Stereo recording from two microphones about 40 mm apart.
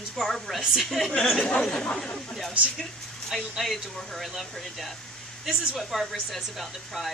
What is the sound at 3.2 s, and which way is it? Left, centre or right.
Speech, centre.